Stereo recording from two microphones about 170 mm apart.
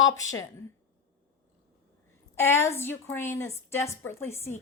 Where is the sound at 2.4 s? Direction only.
15° left (ahead or behind).